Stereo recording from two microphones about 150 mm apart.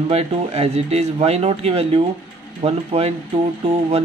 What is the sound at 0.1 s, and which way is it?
Speech, 45° right (ahead or behind).